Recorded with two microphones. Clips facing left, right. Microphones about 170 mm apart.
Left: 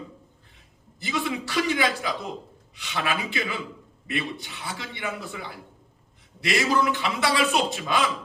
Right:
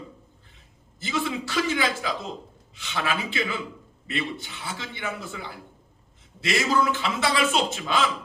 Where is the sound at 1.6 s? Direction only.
20° left (ahead or behind).